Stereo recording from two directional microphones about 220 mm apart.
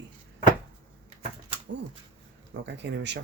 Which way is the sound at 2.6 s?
55° right (ahead or behind).